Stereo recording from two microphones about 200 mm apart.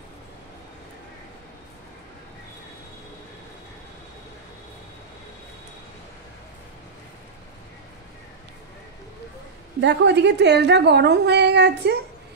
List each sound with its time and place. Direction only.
9.8 s a woman's voice: 60° right (ahead or behind)